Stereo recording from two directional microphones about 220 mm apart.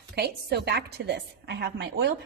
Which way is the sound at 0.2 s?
45° right (ahead or behind).